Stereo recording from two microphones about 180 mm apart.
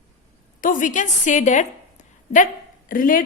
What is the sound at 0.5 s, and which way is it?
A woman's voice, 50° left (ahead or behind).